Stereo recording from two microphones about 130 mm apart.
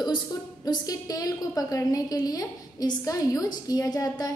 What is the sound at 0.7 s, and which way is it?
A woman's voice, 30° left (ahead or behind).